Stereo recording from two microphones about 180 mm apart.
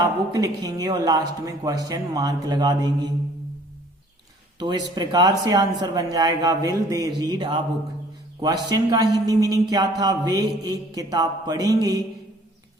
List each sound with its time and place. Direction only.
0.0 s speech: 20° right (ahead or behind)
4.9 s speech: 20° right (ahead or behind)